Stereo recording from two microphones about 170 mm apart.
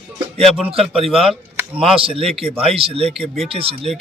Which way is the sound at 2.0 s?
35° right (ahead or behind).